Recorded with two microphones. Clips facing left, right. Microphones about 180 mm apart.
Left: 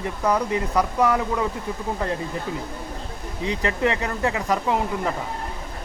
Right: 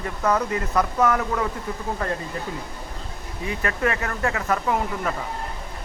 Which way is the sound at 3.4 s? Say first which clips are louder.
Left 2 dB; 20° left (ahead or behind).